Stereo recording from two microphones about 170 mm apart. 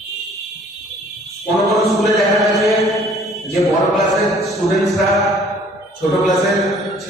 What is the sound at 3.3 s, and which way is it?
Mantra, 20° left (ahead or behind).